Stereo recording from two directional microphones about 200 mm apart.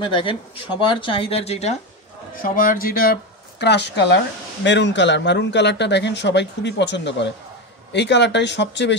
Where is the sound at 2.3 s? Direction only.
45° left (ahead or behind).